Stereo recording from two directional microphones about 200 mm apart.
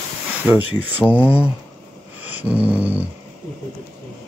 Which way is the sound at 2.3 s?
5° right (ahead or behind).